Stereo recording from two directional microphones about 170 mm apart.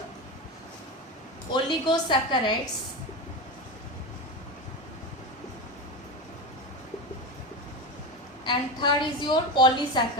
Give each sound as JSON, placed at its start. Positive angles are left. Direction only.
{"t": 1.5, "sound": "a woman's voice", "side_deg": 25}
{"t": 8.4, "sound": "a woman's voice", "side_deg": 25}